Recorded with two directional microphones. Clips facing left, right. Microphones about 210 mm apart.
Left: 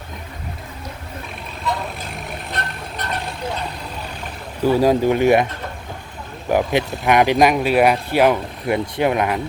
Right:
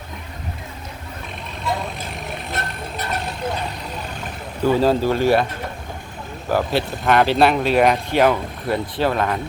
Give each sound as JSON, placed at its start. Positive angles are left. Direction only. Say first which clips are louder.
{"t": 1.6, "sound": "vehicle", "louder": "even", "side_deg": 0}
{"t": 4.6, "sound": "speech", "louder": "left 2 dB", "side_deg": 10}
{"t": 6.5, "sound": "speech", "louder": "left 2 dB", "side_deg": 15}